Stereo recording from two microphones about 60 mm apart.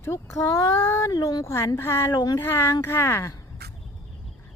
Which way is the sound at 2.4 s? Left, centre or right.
Left.